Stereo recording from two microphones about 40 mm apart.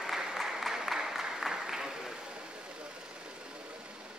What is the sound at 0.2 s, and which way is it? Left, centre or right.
Applause, centre.